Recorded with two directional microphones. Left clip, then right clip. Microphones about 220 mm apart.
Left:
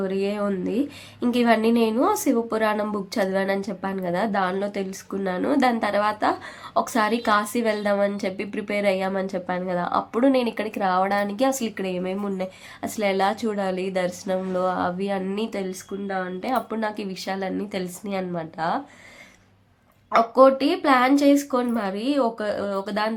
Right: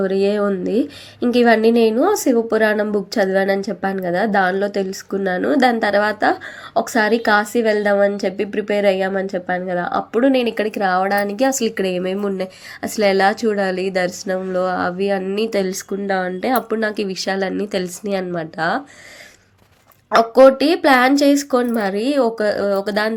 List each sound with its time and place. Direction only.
0.0 s a woman's voice: 15° right (ahead or behind)
15.4 s a woman's voice: 20° right (ahead or behind)
20.1 s a woman's voice: 20° right (ahead or behind)